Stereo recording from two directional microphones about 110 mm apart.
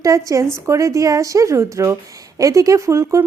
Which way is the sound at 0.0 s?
30° right (ahead or behind).